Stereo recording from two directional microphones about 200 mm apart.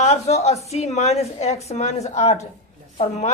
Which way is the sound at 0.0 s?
35° left (ahead or behind).